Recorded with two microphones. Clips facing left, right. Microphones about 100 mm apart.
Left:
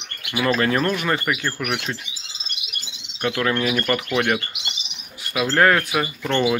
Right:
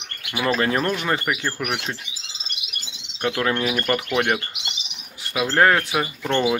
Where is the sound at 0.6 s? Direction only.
20° right (ahead or behind).